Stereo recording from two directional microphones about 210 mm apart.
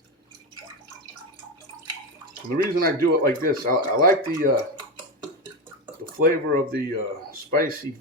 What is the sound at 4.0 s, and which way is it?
Speech, 40° right (ahead or behind).